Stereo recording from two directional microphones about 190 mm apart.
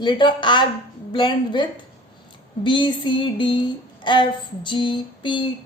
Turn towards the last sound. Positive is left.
turn(degrees=25)  # may be behind; listen again after turning